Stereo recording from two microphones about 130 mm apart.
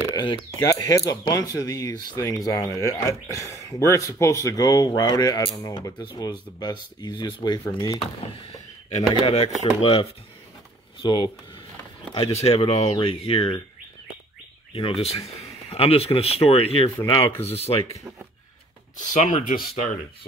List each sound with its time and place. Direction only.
0.1 s speech: 35° left (ahead or behind)
8.0 s a man's voice: 50° left (ahead or behind)
11.0 s speech: 35° left (ahead or behind)
12.1 s a man's voice: 50° left (ahead or behind)
12.9 s a man's voice: 40° left (ahead or behind)
14.7 s a man's voice: 45° left (ahead or behind)
19.1 s speech: 70° left (ahead or behind)